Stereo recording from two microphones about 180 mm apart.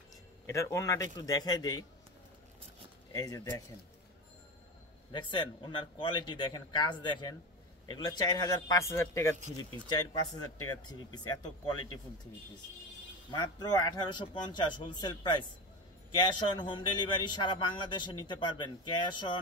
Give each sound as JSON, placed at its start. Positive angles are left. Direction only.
{"t": 0.5, "sound": "a man's voice", "side_deg": 15}
{"t": 3.1, "sound": "speech", "side_deg": 20}
{"t": 5.1, "sound": "a man's voice", "side_deg": 25}
{"t": 13.3, "sound": "a man's voice", "side_deg": 20}